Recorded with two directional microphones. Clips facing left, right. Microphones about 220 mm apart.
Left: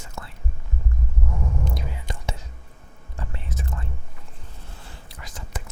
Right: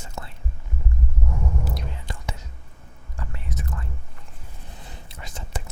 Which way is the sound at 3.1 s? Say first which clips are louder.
Even; 25° left (ahead or behind).